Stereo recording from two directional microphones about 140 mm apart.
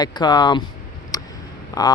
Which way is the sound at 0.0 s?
30° left (ahead or behind).